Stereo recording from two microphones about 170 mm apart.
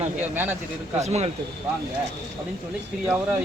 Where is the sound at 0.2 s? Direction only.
10° right (ahead or behind).